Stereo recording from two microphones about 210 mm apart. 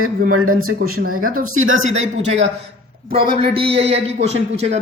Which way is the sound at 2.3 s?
60° right (ahead or behind).